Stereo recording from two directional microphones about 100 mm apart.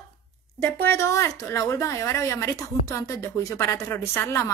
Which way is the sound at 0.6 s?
25° left (ahead or behind).